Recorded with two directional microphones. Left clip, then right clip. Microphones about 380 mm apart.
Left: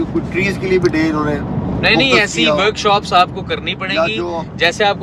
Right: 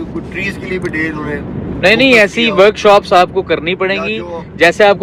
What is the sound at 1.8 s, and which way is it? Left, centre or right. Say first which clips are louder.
Speech: right 4 dB; centre.